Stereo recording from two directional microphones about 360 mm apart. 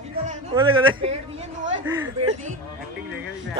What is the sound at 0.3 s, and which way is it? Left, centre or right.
Speech, centre.